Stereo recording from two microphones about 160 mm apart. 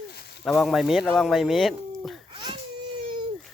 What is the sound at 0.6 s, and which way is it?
Speech, centre (ahead or behind).